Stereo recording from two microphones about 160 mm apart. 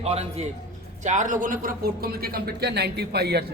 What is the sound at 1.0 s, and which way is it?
Speech, 50° right (ahead or behind).